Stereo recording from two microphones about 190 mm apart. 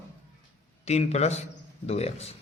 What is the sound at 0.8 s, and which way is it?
Speech, 35° left (ahead or behind).